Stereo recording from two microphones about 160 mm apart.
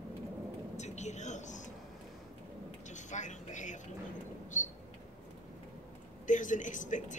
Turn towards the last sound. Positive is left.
turn(degrees=50)  # may be behind; listen again after turning